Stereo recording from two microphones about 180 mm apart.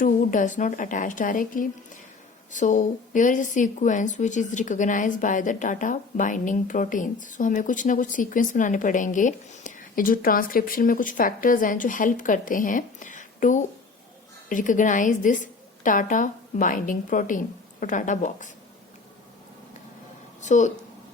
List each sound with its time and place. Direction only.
0.0 s a woman's voice: 45° left (ahead or behind)
20.4 s speech: 40° left (ahead or behind)